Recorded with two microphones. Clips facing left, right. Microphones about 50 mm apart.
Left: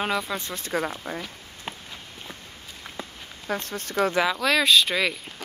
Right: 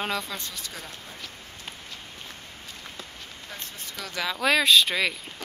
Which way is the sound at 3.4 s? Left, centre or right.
Left.